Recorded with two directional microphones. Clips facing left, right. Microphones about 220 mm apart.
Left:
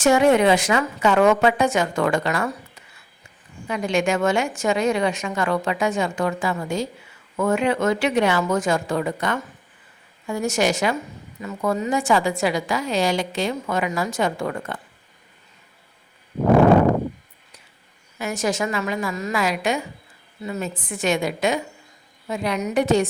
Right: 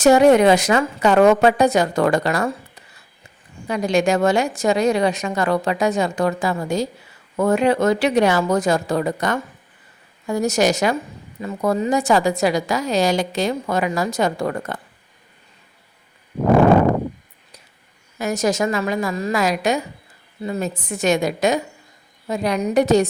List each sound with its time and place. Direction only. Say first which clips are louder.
0.0 s a woman's voice: right 4 dB; 40° right (ahead or behind)
18.2 s a woman's voice: right 4 dB; 40° right (ahead or behind)